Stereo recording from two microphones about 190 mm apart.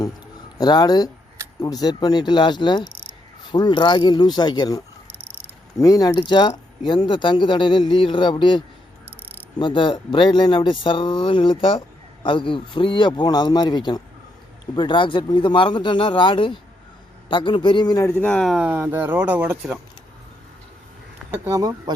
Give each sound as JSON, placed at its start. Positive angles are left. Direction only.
{"t": 0.6, "sound": "speech", "side_deg": 20}
{"t": 18.2, "sound": "speech", "side_deg": 5}
{"t": 21.2, "sound": "speech", "side_deg": -15}